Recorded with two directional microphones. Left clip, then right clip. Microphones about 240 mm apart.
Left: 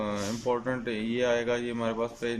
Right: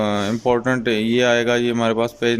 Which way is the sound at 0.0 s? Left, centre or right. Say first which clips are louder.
Right 11 dB; right.